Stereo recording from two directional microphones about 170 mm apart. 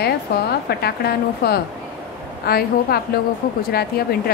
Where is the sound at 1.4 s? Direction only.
70° left (ahead or behind).